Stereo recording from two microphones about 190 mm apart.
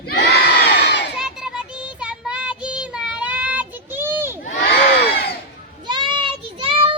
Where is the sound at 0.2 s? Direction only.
60° left (ahead or behind).